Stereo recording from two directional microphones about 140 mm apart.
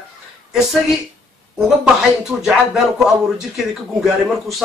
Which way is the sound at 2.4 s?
5° right (ahead or behind).